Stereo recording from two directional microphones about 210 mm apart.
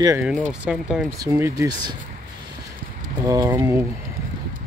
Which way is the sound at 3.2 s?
15° right (ahead or behind).